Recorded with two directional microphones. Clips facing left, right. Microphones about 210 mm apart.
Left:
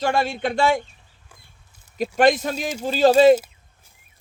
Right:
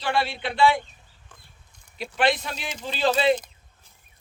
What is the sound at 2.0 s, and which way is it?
Speech, 45° left (ahead or behind).